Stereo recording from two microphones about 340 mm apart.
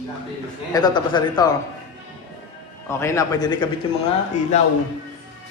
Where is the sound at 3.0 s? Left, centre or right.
Centre.